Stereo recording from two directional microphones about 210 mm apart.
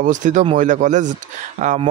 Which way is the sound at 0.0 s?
35° right (ahead or behind).